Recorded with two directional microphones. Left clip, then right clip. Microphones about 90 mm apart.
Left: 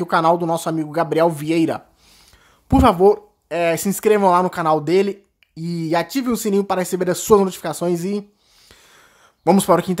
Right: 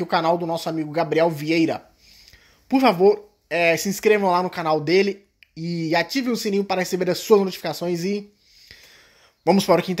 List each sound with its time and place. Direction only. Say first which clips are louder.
0.0 s speech: left 4 dB; 35° left (ahead or behind)
3.4 s speech: even; 25° left (ahead or behind)
8.6 s a sound: right 1 dB; 30° left (ahead or behind)
9.6 s speech: left 2 dB; 25° left (ahead or behind)